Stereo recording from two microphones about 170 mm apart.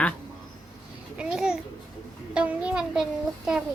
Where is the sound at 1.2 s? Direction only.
5° right (ahead or behind).